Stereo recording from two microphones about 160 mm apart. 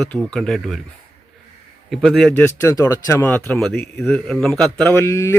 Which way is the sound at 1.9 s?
Centre (ahead or behind).